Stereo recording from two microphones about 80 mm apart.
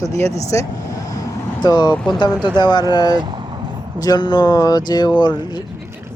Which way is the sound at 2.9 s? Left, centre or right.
Left.